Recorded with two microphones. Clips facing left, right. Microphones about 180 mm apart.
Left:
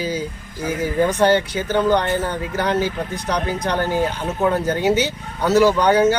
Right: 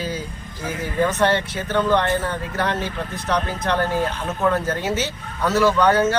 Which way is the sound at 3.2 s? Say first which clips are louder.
Even; 35° left (ahead or behind).